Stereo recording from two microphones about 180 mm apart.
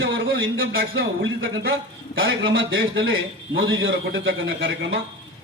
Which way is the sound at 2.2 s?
90° right.